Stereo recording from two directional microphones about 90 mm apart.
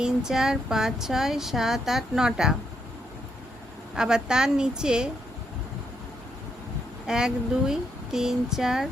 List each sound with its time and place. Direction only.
0.0 s speech: 5° right (ahead or behind)
3.9 s a woman's voice: 10° right (ahead or behind)
7.1 s speech: 10° right (ahead or behind)